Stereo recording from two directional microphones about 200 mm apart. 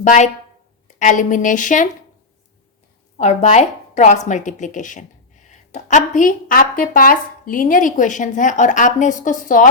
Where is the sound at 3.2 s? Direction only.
35° left (ahead or behind).